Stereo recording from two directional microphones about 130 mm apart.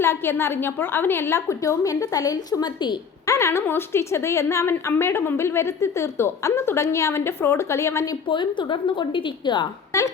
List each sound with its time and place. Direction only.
0.0 s a woman's voice: 20° left (ahead or behind); by 3.0 s 35° left (ahead or behind)
3.2 s a woman's voice: 20° left (ahead or behind)
8.3 s a woman's voice: 35° left (ahead or behind)
9.9 s a woman's voice: 25° left (ahead or behind)